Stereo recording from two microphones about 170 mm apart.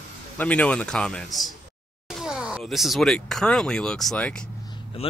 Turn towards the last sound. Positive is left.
turn(degrees=35)  # may be behind; listen again after turning